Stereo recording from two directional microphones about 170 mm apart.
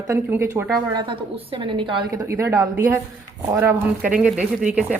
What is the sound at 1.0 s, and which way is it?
A woman's voice, 30° right (ahead or behind).